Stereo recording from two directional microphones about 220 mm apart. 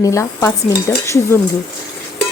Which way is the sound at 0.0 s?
15° left (ahead or behind).